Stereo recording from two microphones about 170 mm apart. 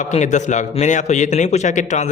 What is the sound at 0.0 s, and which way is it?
A man's voice, 45° left (ahead or behind).